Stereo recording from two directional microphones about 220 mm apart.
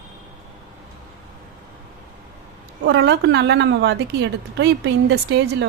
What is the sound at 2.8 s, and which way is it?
A woman's voice, 50° right (ahead or behind).